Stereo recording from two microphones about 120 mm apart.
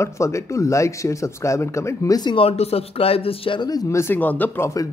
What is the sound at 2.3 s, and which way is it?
Speech, 55° left (ahead or behind).